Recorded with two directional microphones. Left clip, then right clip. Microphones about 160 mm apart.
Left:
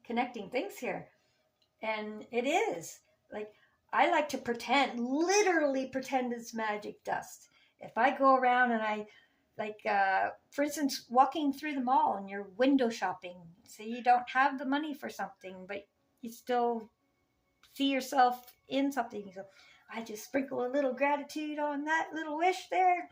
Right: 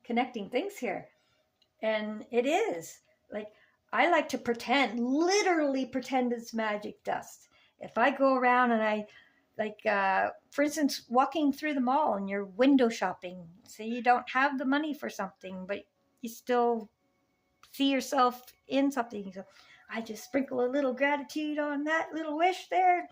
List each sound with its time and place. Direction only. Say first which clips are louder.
0.0 s speech: right 3 dB; 45° right (ahead or behind)
3.8 s a woman's voice: right 2 dB; 45° right (ahead or behind)